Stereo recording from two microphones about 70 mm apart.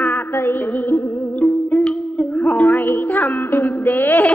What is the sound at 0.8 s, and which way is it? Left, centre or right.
Music, left.